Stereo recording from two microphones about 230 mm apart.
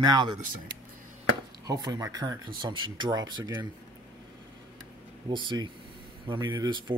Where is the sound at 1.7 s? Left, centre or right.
Centre.